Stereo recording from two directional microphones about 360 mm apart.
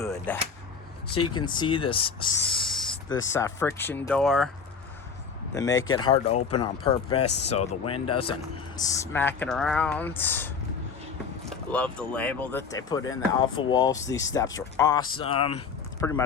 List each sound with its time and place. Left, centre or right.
0.0 s a sound: centre
1.0 s speech: left
1.5 s speech: centre
5.5 s speech: centre